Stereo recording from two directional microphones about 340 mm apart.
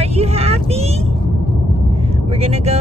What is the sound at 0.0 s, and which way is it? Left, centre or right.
Child singing, centre.